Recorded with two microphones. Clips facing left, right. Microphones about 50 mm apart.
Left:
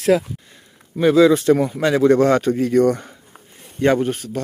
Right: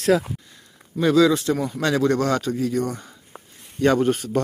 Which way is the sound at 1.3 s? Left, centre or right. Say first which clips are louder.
Left 6 dB; left.